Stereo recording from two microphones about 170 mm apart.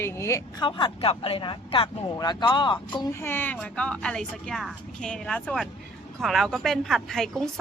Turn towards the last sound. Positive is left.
turn(degrees=0)  # may be behind; listen again after turning